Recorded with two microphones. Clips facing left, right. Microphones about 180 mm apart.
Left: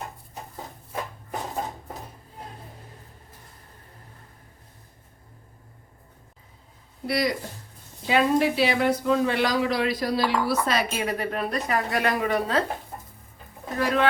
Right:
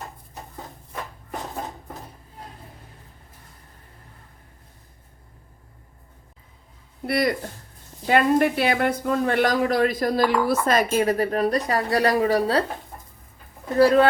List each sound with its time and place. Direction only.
7.1 s a woman's voice: 55° right (ahead or behind); by 12.6 s 35° right (ahead or behind)
13.7 s speech: 35° right (ahead or behind)